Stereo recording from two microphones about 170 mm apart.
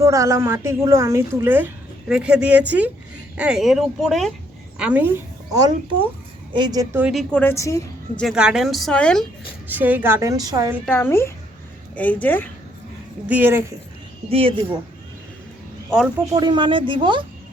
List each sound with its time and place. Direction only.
0.0 s a woman's voice: 20° right (ahead or behind)
6.5 s speech: 25° right (ahead or behind)
6.9 s a woman's voice: 5° right (ahead or behind); by 8.2 s 20° left (ahead or behind)
8.2 s speech: 5° right (ahead or behind)
9.6 s a woman's voice: 10° right (ahead or behind)
10.8 s a woman's voice: 10° left (ahead or behind)
13.2 s a woman's voice: 10° right (ahead or behind)
14.3 s speech: 35° right (ahead or behind)
16.3 s speech: 25° right (ahead or behind)